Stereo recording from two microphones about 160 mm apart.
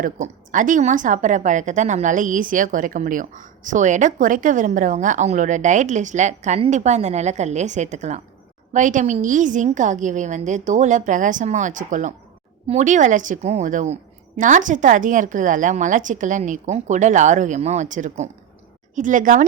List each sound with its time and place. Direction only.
0.0 s a woman's voice: 55° right (ahead or behind)